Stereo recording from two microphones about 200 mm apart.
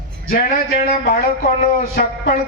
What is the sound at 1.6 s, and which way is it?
Speech, 45° left (ahead or behind).